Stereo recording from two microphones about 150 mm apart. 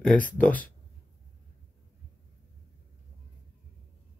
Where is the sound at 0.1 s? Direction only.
10° left (ahead or behind).